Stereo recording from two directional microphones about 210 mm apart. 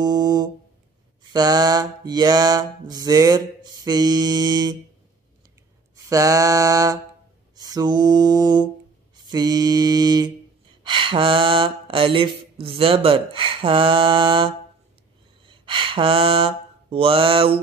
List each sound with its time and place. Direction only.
0.0 s music: 20° right (ahead or behind)
1.3 s mantra: 20° right (ahead or behind)
5.9 s mantra: 15° right (ahead or behind)